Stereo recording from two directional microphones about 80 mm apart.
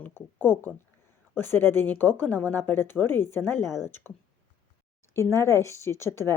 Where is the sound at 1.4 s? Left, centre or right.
Left.